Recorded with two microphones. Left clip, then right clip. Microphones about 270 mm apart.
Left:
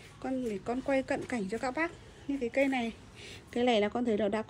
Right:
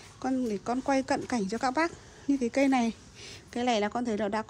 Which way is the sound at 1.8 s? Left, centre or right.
Right.